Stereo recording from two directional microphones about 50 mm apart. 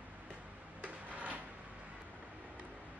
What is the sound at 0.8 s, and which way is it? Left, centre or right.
Drawer open or close, right.